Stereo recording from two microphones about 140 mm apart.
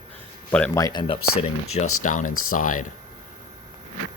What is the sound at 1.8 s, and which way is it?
Speech, 65° left (ahead or behind).